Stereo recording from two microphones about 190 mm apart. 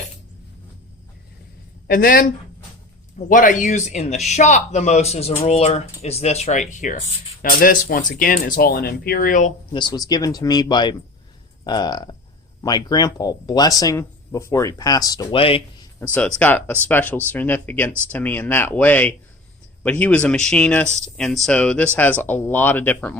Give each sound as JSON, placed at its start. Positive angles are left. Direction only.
{"t": 1.9, "sound": "speech", "side_deg": 50}
{"t": 3.2, "sound": "speech", "side_deg": 45}
{"t": 9.7, "sound": "speech", "side_deg": 20}
{"t": 16.1, "sound": "speech", "side_deg": 5}